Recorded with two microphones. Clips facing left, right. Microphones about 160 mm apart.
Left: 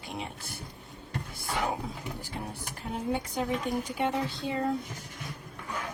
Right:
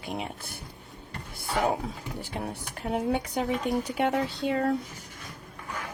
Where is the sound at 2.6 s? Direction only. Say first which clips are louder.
Right 5 dB; 65° right (ahead or behind).